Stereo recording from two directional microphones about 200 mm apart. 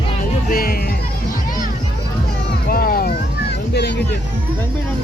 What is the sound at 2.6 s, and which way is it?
Music, 45° left (ahead or behind).